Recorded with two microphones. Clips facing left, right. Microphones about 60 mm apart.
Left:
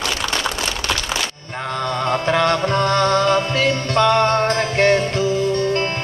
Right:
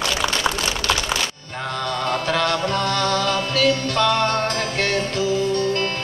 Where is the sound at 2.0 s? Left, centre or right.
Left.